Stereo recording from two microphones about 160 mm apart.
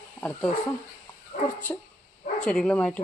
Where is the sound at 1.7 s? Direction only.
20° left (ahead or behind).